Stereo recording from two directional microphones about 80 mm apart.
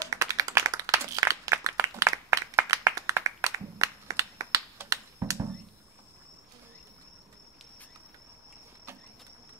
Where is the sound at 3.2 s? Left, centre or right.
Right.